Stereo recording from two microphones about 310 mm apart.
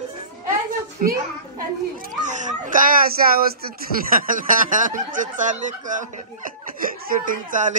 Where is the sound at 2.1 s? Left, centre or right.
Right.